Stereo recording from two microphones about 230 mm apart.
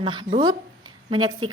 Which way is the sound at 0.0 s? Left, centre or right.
Right.